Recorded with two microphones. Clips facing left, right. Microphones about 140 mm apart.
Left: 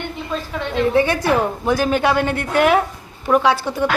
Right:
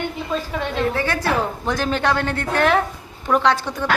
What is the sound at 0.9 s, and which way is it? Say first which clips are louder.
A woman's voice: left 5 dB; 15° left (ahead or behind).